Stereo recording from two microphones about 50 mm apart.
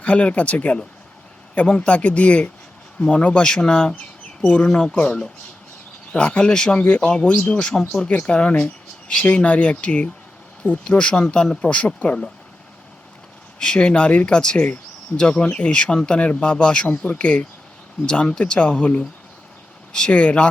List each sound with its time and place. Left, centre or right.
0.0 s speech: left
5.0 s speech: centre
8.1 s speech: left
13.6 s speech: centre